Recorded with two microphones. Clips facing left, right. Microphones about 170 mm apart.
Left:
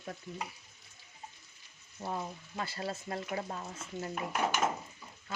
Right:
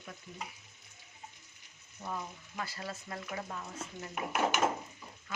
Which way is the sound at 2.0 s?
30° left (ahead or behind).